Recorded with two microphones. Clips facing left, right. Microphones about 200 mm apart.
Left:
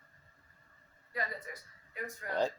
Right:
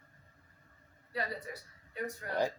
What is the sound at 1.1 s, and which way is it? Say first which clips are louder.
Speech: right 2 dB; 30° right (ahead or behind).